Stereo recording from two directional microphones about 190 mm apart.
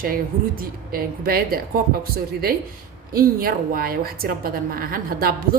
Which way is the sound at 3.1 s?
50° right (ahead or behind).